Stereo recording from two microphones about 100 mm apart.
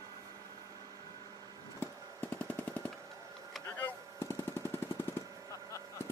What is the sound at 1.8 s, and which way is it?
Machine gun, 20° left (ahead or behind).